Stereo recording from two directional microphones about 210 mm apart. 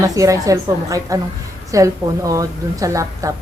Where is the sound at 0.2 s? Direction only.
15° right (ahead or behind).